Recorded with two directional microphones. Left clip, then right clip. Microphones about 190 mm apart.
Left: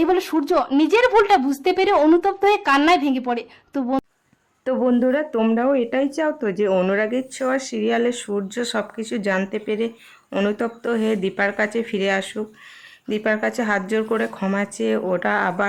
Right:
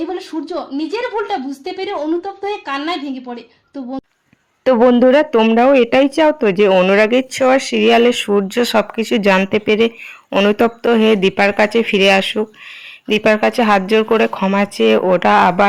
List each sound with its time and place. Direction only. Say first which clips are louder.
0.0 s speech: left 4 dB; 30° left (ahead or behind)
4.6 s speech: right 9 dB; 20° right (ahead or behind)
6.9 s speech: right 9 dB; 20° right (ahead or behind)
10.2 s speech: right 8 dB; 10° right (ahead or behind)
10.5 s speech: right 10 dB; 20° right (ahead or behind)